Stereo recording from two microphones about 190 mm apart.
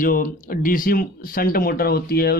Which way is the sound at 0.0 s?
50° left (ahead or behind).